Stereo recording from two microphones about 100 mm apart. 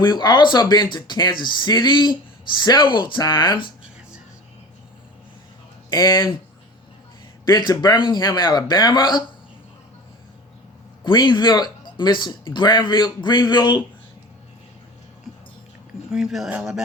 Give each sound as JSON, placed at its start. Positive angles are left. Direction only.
{"t": 0.0, "sound": "speech", "side_deg": 45}
{"t": 5.9, "sound": "speech", "side_deg": 45}
{"t": 7.4, "sound": "speech", "side_deg": 45}
{"t": 11.0, "sound": "speech", "side_deg": 50}
{"t": 16.1, "sound": "speech", "side_deg": -5}